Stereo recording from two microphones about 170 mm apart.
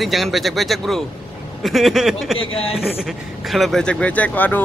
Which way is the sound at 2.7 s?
Centre (ahead or behind).